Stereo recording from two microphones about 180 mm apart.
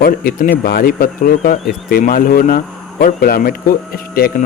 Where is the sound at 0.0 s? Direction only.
55° left (ahead or behind).